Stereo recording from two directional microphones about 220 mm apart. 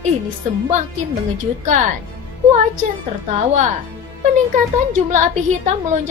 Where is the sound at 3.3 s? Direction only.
30° right (ahead or behind).